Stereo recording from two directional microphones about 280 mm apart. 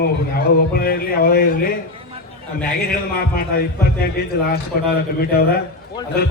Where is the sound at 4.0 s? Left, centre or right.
Left.